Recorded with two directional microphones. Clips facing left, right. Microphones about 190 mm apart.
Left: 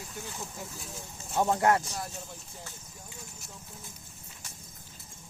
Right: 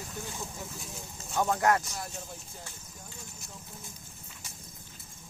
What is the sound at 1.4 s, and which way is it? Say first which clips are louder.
Speech: left 1 dB; 25° left (ahead or behind).